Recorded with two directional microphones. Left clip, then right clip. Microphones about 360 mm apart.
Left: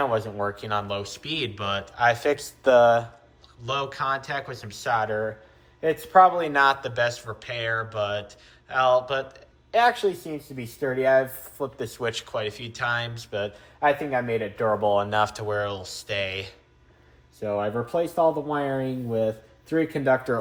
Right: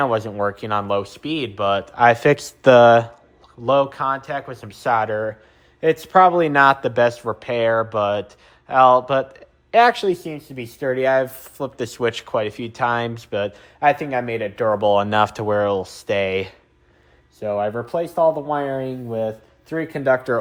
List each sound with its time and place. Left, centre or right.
0.0 s speech: right
3.7 s speech: centre